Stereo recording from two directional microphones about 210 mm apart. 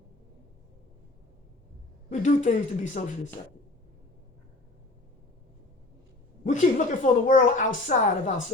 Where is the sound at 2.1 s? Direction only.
35° left (ahead or behind).